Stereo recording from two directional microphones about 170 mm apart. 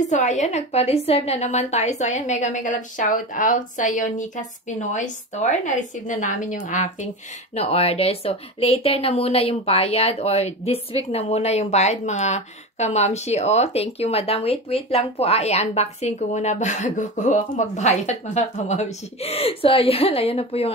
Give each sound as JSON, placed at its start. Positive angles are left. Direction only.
{"t": 0.0, "sound": "a woman's voice", "side_deg": 45}
{"t": 7.5, "sound": "speech", "side_deg": 35}